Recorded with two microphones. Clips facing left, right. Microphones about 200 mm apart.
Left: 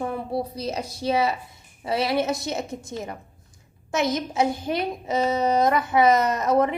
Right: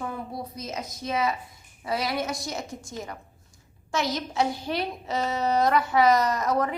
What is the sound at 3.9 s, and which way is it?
A child's voice, 20° left (ahead or behind).